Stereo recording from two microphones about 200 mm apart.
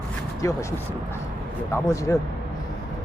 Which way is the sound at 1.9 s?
15° left (ahead or behind).